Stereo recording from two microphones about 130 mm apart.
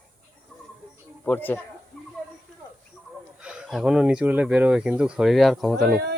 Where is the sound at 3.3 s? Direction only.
5° right (ahead or behind).